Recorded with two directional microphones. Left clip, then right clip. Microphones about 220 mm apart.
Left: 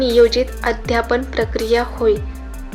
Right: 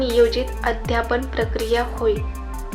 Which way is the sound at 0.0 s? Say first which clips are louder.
Left 5 dB; 35° left (ahead or behind).